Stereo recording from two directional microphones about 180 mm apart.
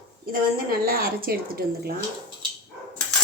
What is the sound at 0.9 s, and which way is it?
Speech, 55° right (ahead or behind).